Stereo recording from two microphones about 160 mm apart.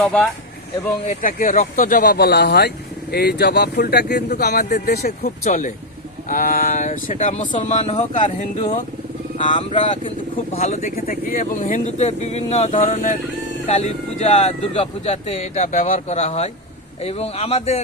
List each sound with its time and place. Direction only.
0.0 s speech: 5° left (ahead or behind)
1.0 s speech: 60° left (ahead or behind)
5.5 s speech: 55° left (ahead or behind)
9.7 s speech: 30° left (ahead or behind)
10.5 s speech: 45° left (ahead or behind)
11.0 s speech: 65° left (ahead or behind); by 17.7 s 40° left (ahead or behind)